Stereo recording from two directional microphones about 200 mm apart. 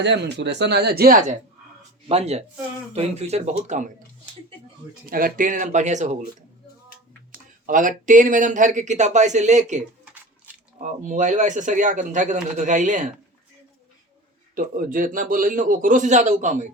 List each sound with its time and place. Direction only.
0.0 s speech: 60° right (ahead or behind); by 1.4 s 45° right (ahead or behind)
2.0 s a man's voice: 30° right (ahead or behind)
5.0 s a man's voice: 45° right (ahead or behind)
7.7 s a man's voice: 40° right (ahead or behind)
14.5 s a man's voice: 45° right (ahead or behind)